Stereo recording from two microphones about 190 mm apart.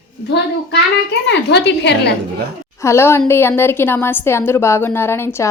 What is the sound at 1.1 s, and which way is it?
A woman's voice, 65° left (ahead or behind).